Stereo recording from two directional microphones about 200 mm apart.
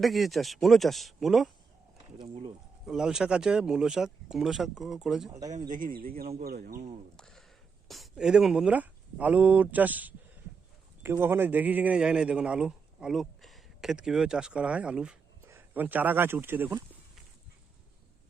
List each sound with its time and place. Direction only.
0.0 s speech: centre (ahead or behind)
2.1 s speech: 30° right (ahead or behind)
2.8 s speech: centre (ahead or behind)
5.3 s speech: 20° right (ahead or behind)
5.5 s speech: 40° right (ahead or behind)
7.2 s a sound: 5° left (ahead or behind)
7.9 s a man's voice: centre (ahead or behind)